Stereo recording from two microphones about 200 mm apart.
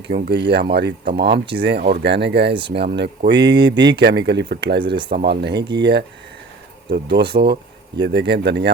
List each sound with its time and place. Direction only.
0.1 s speech: 60° right (ahead or behind)